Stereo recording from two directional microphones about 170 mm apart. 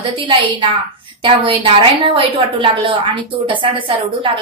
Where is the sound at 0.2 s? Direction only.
30° right (ahead or behind).